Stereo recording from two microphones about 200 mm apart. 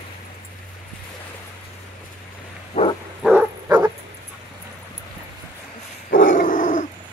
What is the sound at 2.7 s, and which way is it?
Bow-wow, 30° left (ahead or behind).